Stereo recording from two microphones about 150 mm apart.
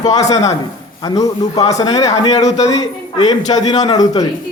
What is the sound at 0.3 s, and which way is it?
A man's voice, 25° left (ahead or behind).